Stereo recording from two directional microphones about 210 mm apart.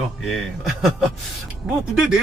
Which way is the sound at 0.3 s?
Centre (ahead or behind).